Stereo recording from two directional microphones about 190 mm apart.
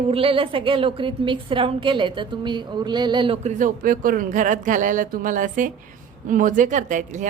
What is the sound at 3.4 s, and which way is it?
A woman's voice, 45° right (ahead or behind).